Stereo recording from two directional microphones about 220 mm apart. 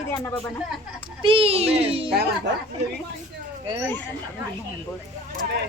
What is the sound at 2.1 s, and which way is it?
Speech, 45° right (ahead or behind).